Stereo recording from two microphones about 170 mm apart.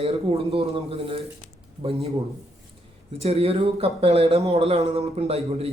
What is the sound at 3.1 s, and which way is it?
A man's voice, 35° right (ahead or behind).